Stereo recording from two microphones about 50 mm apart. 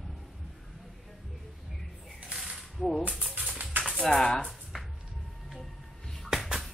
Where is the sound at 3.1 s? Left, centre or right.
Centre.